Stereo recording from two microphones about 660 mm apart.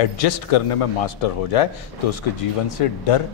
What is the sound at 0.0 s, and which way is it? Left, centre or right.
A man's voice, left.